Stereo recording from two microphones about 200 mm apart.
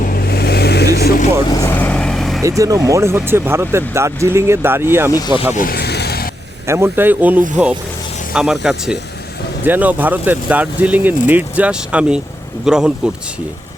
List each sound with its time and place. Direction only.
0.0 s vehicle: 50° left (ahead or behind)
1.5 s vehicle: 15° left (ahead or behind)
2.4 s speech: 15° right (ahead or behind)
5.5 s vehicle: 50° left (ahead or behind)
6.7 s speech: 10° right (ahead or behind)